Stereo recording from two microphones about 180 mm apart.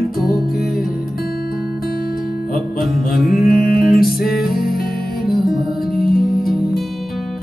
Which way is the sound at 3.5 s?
55° left (ahead or behind).